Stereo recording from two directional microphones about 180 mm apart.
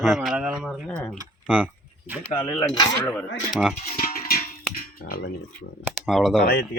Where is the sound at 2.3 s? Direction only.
25° left (ahead or behind).